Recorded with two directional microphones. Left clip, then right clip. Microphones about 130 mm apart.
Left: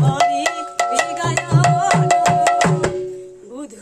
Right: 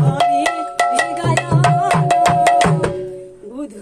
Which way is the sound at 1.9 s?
5° right (ahead or behind).